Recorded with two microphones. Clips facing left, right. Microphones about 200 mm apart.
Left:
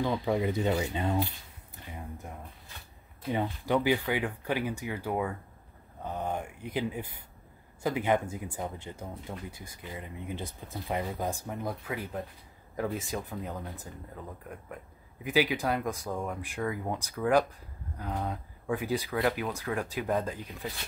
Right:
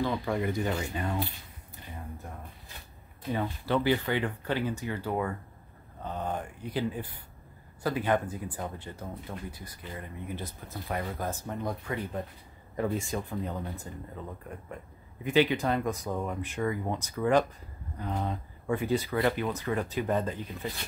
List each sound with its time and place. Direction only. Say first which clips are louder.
0.0 s speech: left 1 dB; 15° left (ahead or behind)
3.3 s speech: left 1 dB; 15° left (ahead or behind); by 20.7 s centre (ahead or behind)